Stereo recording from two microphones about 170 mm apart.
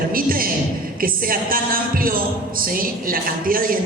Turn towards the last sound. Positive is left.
turn(degrees=-55)  # may be behind; listen again after turning